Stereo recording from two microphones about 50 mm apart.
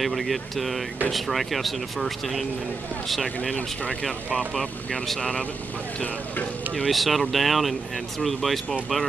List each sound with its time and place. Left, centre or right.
0.0 s speech: centre
4.6 s speech: centre
5.2 s speech: left
6.9 s speech: centre